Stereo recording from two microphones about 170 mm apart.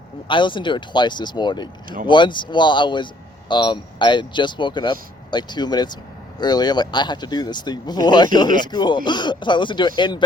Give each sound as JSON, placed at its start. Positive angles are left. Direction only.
{"t": 0.3, "sound": "speech", "side_deg": 30}